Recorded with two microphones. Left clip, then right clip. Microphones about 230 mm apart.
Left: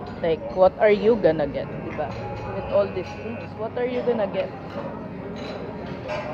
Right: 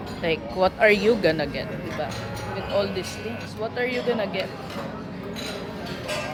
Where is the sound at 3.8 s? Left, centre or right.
Centre.